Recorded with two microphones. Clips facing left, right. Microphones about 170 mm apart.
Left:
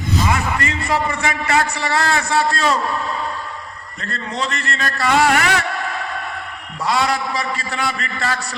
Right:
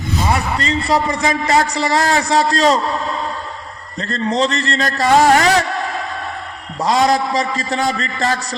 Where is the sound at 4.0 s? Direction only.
35° right (ahead or behind).